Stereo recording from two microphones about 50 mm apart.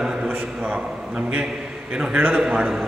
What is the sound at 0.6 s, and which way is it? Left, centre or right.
A man's voice, right.